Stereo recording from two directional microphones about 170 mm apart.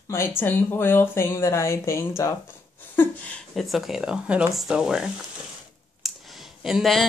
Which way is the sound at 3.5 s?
Centre (ahead or behind).